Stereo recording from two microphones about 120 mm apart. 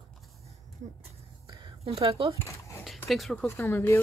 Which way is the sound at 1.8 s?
55° right (ahead or behind).